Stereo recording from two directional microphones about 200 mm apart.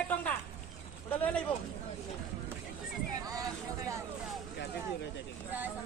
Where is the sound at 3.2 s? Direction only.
15° right (ahead or behind).